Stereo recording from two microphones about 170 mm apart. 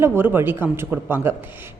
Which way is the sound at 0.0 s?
15° right (ahead or behind).